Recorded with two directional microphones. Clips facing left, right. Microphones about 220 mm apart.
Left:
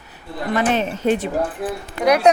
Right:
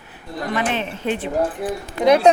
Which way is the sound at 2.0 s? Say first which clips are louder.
Right 1 dB; 25° right (ahead or behind).